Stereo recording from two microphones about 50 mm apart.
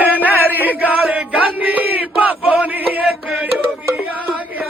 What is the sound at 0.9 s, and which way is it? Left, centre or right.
Chant, right.